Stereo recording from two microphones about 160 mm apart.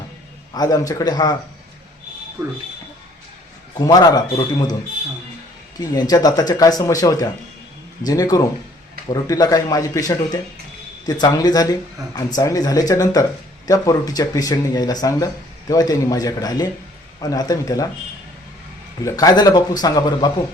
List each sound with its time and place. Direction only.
0.5 s speech: 25° left (ahead or behind)
3.8 s speech: 25° left (ahead or behind)
5.8 s speech: 25° left (ahead or behind)
19.0 s speech: 20° left (ahead or behind)